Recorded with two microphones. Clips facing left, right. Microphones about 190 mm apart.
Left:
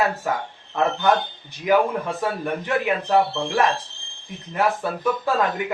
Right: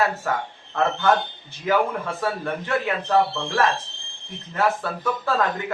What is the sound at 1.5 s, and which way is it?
Speech, 15° left (ahead or behind).